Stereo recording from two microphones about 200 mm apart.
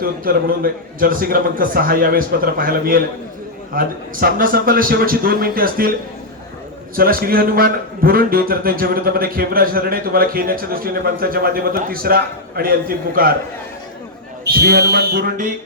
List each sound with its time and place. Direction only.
0.0 s a man's voice: 45° right (ahead or behind)
6.9 s a man's voice: 45° right (ahead or behind)
14.4 s music: 55° right (ahead or behind)